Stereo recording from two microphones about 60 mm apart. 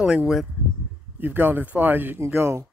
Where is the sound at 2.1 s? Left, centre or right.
Right.